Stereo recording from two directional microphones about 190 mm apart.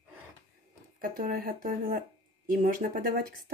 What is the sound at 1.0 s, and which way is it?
Speech, 50° right (ahead or behind).